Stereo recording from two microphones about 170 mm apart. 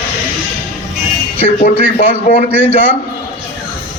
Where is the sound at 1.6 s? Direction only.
45° left (ahead or behind).